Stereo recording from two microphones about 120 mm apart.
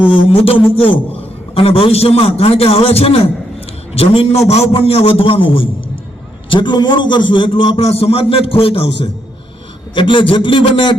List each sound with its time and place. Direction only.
0.1 s a man's voice: 55° left (ahead or behind)
7.8 s a man's voice: 55° left (ahead or behind)
9.9 s a man's voice: 45° left (ahead or behind)